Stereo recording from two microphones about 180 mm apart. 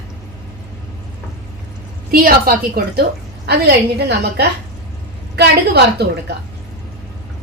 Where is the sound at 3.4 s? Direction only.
65° right (ahead or behind).